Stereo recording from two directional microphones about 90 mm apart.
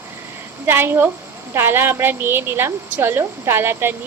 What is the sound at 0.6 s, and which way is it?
A woman's voice, 25° right (ahead or behind).